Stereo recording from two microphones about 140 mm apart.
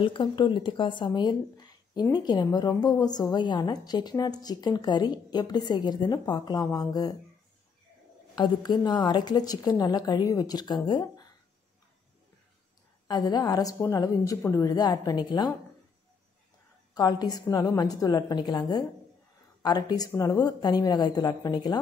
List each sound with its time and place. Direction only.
0.0 s a woman's voice: 35° left (ahead or behind)
8.4 s a woman's voice: 30° left (ahead or behind)
13.1 s a woman's voice: 30° left (ahead or behind)
16.9 s a woman's voice: 30° left (ahead or behind)